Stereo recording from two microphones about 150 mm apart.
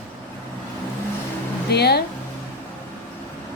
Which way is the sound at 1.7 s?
90° left.